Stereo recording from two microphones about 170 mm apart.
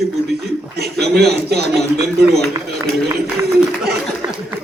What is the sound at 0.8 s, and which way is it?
A man's voice, 70° right (ahead or behind).